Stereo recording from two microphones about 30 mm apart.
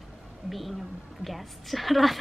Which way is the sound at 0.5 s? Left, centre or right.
Centre.